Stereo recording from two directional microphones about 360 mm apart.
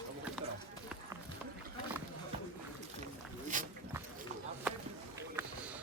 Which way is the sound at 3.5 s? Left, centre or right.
Right.